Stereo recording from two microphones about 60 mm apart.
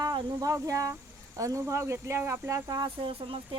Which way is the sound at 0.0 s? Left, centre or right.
Right.